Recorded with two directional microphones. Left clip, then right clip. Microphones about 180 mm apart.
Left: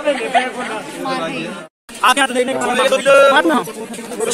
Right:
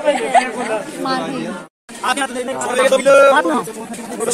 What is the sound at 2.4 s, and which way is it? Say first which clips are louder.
Speech: left 5 dB; 50° left (ahead or behind).